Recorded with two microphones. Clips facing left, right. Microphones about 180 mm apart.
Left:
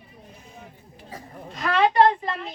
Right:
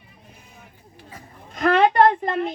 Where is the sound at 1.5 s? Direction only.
55° right (ahead or behind).